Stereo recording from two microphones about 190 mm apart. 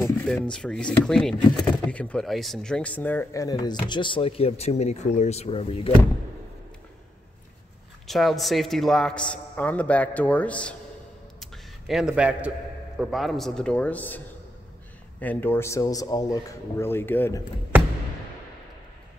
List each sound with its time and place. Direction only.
0.0 s speech: 5° left (ahead or behind); by 5.9 s 30° left (ahead or behind)
8.1 s a man's voice: centre (ahead or behind)